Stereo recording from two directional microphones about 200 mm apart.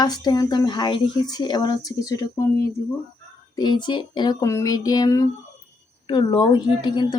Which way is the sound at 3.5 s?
20° left (ahead or behind).